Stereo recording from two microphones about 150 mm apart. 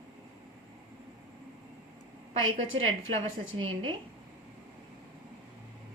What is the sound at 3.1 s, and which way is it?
Speech, 35° right (ahead or behind).